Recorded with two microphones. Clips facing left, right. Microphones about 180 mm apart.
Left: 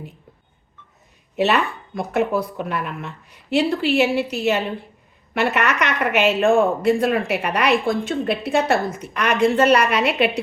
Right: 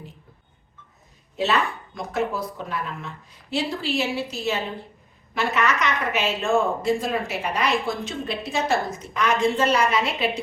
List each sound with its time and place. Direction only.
1.4 s speech: 65° left (ahead or behind)